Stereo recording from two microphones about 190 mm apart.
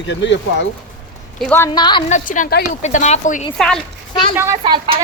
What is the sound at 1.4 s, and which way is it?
Speech, 10° left (ahead or behind).